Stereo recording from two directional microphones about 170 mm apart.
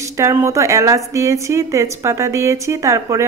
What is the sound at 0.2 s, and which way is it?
A woman's voice, 15° right (ahead or behind).